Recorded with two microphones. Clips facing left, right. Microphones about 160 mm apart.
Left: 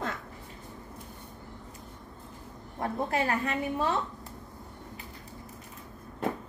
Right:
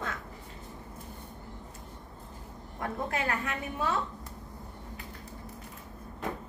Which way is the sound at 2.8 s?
30° left (ahead or behind).